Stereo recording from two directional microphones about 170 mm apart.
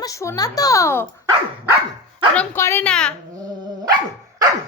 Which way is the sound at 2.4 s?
15° left (ahead or behind).